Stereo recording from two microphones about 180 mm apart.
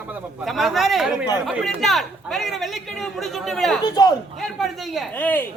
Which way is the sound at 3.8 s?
20° left (ahead or behind).